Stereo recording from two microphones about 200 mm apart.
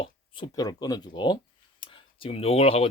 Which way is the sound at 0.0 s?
25° left (ahead or behind).